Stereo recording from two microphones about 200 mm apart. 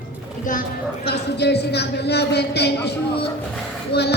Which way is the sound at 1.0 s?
55° left (ahead or behind).